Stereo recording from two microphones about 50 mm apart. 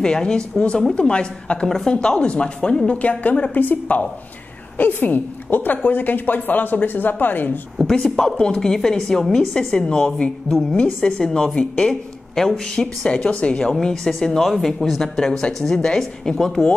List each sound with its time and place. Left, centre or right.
0.0 s speech: centre; by 7.5 s left
7.8 s speech: centre
9.5 s speech: centre
13.7 s speech: centre